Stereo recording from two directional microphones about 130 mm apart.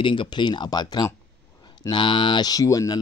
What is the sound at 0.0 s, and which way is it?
A man's voice, 40° left (ahead or behind).